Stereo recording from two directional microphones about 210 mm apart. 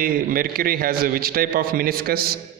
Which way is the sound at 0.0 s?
45° right (ahead or behind).